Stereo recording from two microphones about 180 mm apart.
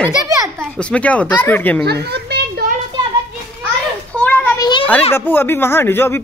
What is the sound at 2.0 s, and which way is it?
Children playing, 65° right (ahead or behind).